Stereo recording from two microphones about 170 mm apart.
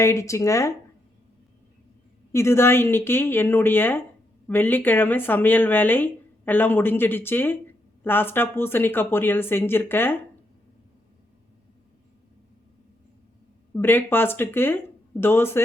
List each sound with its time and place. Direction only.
0.0 s speech: 15° left (ahead or behind)
2.3 s speech: 15° left (ahead or behind)
13.7 s speech: 10° left (ahead or behind)